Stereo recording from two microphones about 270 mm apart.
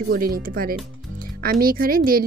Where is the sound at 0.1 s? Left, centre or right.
Right.